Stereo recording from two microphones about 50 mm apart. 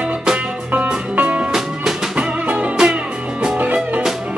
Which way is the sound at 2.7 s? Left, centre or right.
Centre.